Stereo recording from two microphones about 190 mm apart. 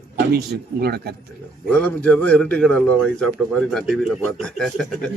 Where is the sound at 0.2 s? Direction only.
55° right (ahead or behind).